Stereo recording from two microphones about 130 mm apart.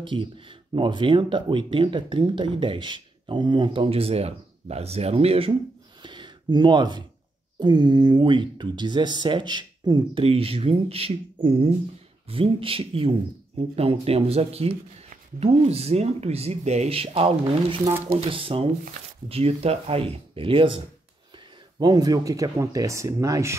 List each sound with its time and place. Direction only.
0.0 s speech: 40° right (ahead or behind)
6.0 s a sound: 35° right (ahead or behind)
7.5 s speech: 35° right (ahead or behind)
10.2 s speech: 45° right (ahead or behind)
21.7 s speech: 30° right (ahead or behind)